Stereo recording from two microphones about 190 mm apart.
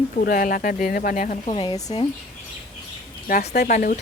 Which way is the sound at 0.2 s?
50° left (ahead or behind).